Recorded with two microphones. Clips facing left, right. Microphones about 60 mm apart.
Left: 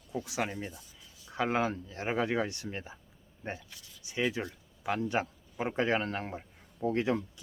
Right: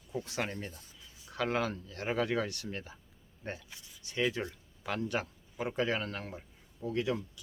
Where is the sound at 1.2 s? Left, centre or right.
Left.